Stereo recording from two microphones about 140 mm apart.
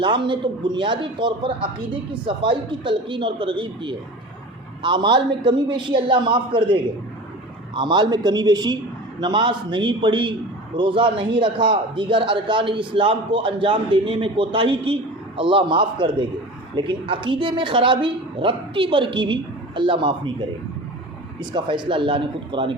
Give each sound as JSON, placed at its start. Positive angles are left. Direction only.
{"t": 0.0, "sound": "a man's voice", "side_deg": -35}
{"t": 21.5, "sound": "a man's voice", "side_deg": -35}